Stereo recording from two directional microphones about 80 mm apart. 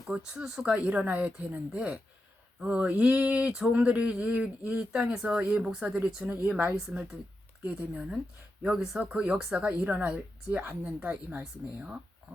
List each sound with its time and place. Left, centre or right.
0.1 s speech: centre
6.2 s speech: right; by 9.0 s centre
9.0 s speech: centre